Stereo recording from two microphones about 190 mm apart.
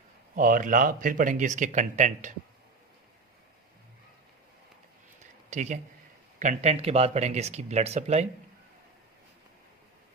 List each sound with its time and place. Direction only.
0.3 s speech: 45° right (ahead or behind)
5.5 s speech: 40° right (ahead or behind)